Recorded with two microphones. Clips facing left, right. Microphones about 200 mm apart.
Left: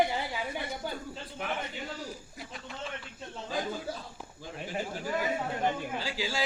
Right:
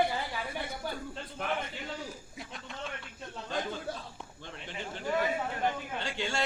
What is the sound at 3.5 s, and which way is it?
A man's voice, 5° left (ahead or behind).